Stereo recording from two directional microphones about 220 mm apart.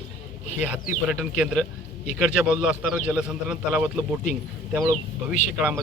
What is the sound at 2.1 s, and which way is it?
Speech, centre (ahead or behind).